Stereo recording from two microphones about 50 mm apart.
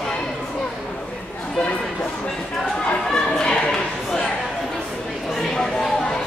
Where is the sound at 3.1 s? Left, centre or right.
Centre.